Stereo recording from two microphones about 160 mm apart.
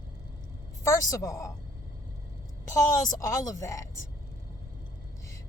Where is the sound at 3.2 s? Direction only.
20° left (ahead or behind).